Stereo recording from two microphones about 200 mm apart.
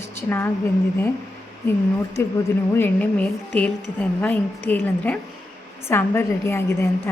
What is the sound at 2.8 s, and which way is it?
A woman's voice, 10° left (ahead or behind).